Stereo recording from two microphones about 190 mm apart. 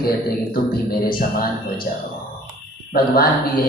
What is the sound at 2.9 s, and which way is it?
Speech, 50° left (ahead or behind).